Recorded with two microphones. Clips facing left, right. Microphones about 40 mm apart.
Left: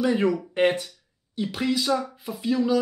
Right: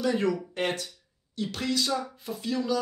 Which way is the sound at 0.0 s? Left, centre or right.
Centre.